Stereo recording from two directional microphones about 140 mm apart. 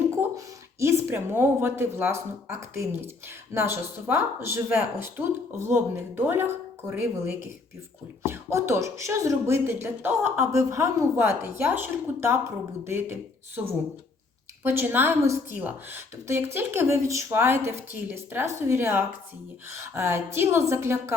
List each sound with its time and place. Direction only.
0.2 s speech: 20° right (ahead or behind)
8.3 s speech: 20° right (ahead or behind)